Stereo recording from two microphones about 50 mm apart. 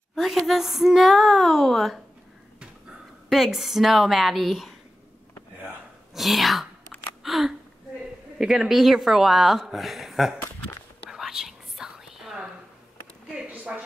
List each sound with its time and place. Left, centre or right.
0.1 s a sound: centre
0.5 s speech: centre
3.3 s speech: centre
6.1 s a woman's voice: centre
11.1 s whispering: centre
13.5 s a sound: right